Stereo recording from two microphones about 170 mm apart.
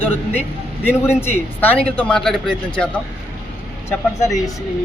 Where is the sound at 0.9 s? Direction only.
15° left (ahead or behind).